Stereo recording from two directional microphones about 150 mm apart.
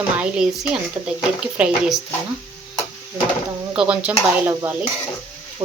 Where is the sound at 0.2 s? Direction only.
5° right (ahead or behind).